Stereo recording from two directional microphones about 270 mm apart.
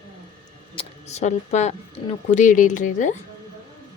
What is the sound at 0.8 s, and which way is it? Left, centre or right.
Speech, left.